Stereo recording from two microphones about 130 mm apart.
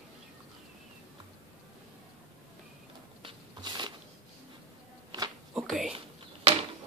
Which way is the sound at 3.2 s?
35° right (ahead or behind).